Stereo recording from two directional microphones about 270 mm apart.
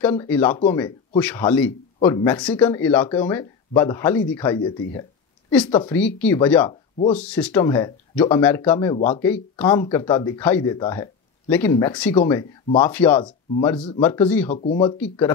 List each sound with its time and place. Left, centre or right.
0.1 s speech: centre
6.7 s speech: centre
7.2 s speech: centre
13.2 s speech: centre
15.0 s speech: centre